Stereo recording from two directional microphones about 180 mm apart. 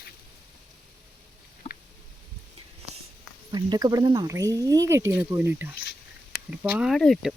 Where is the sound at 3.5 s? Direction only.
25° right (ahead or behind); by 7.3 s centre (ahead or behind).